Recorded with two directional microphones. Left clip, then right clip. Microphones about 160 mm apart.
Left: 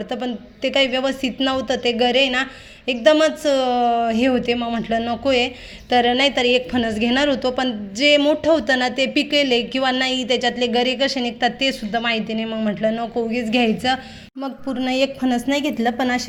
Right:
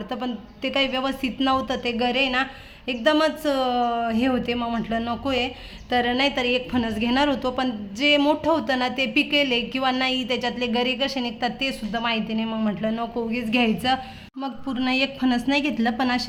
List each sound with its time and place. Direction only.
0.1 s a woman's voice: 15° left (ahead or behind)